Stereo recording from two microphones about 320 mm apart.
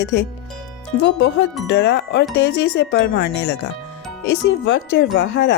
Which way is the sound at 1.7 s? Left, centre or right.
Left.